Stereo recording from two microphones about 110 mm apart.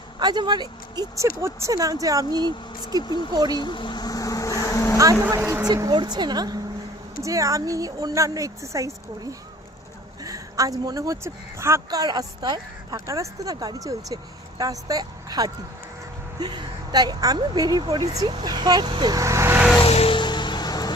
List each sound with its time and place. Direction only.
0.2 s speech: 40° right (ahead or behind)
3.0 s speech: 40° left (ahead or behind)
3.3 s speech: 40° right (ahead or behind)
3.6 s speech: 45° left (ahead or behind); by 4.9 s 25° left (ahead or behind)
5.6 s speech: 35° right (ahead or behind)
10.2 s speech: 30° right (ahead or behind)
19.2 s vehicle: 25° right (ahead or behind)
19.8 s music: 60° left (ahead or behind)
20.1 s music: 45° left (ahead or behind)